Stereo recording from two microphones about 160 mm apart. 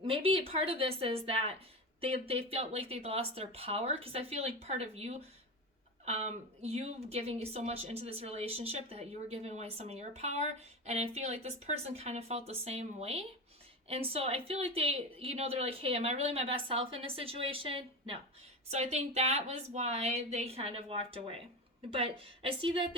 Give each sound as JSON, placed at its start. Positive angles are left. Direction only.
{"t": 0.0, "sound": "speech", "side_deg": -35}